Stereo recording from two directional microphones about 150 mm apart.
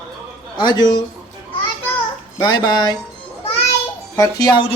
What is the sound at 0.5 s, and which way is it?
Speech, 30° left (ahead or behind).